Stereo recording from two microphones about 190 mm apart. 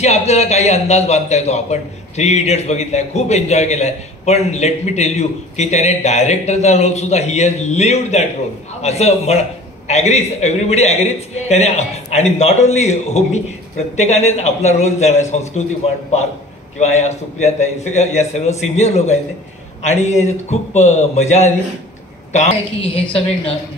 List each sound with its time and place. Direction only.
0.0 s a man's voice: 35° left (ahead or behind)
22.8 s a woman's voice: 5° left (ahead or behind)